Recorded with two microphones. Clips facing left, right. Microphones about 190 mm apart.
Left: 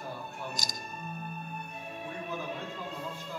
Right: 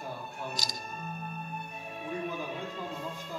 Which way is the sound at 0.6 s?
45° left (ahead or behind).